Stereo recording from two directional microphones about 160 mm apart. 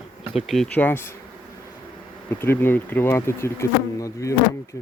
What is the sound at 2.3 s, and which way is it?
Speech, 15° left (ahead or behind).